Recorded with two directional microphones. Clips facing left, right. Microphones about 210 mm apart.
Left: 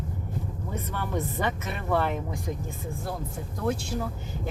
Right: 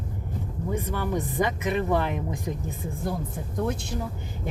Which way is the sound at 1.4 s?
15° right (ahead or behind).